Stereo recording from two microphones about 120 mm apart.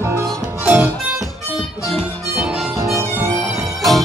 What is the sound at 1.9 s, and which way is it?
Harmonica, centre (ahead or behind).